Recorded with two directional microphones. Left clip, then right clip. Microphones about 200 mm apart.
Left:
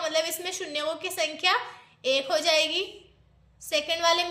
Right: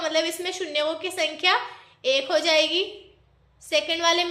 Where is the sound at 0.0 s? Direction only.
20° left (ahead or behind).